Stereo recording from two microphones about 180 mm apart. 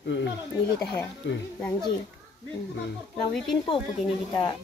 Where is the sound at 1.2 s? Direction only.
90° left.